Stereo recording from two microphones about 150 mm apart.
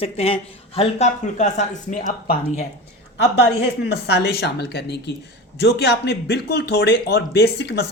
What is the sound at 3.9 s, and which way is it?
A man's voice, 90° left.